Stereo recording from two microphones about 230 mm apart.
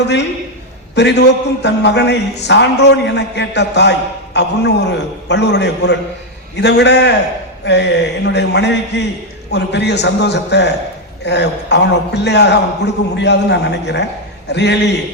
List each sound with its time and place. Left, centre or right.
0.9 s a man's voice: left